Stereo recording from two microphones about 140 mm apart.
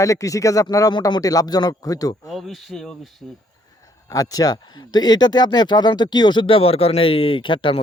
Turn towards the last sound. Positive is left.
turn(degrees=35)  # may be behind; listen again after turning